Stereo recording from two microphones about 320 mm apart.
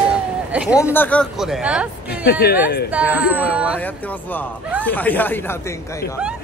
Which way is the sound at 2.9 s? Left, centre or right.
Centre.